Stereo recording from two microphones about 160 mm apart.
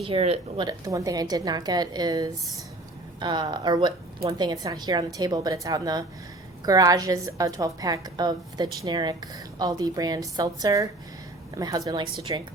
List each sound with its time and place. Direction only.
0.0 s speech: 40° right (ahead or behind)
0.6 s a woman's voice: 25° right (ahead or behind)